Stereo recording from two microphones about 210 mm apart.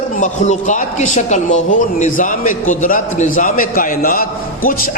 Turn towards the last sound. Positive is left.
turn(degrees=40)  # may be behind; listen again after turning